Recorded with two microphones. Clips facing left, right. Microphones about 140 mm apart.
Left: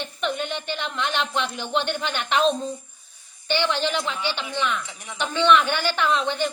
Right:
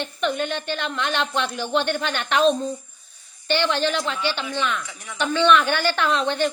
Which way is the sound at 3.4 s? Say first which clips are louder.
Right 2 dB; 15° left (ahead or behind).